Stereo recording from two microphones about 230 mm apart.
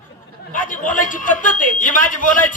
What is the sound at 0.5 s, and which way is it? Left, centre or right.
A man's voice, left.